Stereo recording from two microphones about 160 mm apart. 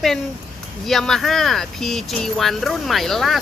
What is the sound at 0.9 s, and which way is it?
Speech, centre (ahead or behind).